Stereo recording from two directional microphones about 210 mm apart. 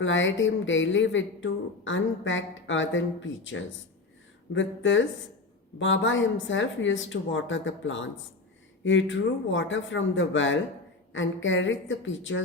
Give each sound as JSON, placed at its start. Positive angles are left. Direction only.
{"t": 0.0, "sound": "speech", "side_deg": 65}